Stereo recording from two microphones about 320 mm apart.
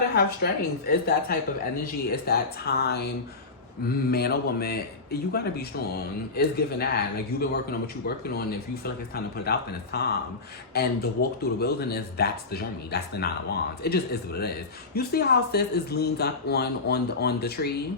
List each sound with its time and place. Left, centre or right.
0.1 s speech: left
3.8 s speech: left